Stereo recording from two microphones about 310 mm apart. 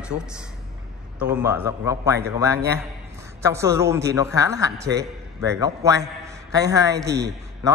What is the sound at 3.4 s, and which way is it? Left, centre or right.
A man's voice, centre.